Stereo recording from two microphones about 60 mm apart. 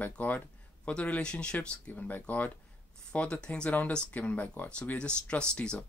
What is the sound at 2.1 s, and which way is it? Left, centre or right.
Speech, left.